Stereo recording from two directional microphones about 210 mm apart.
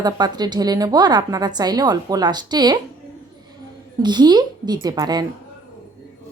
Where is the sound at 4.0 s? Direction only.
20° right (ahead or behind).